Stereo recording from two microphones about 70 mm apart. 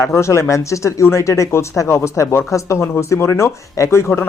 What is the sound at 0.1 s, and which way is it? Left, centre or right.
Speech, left.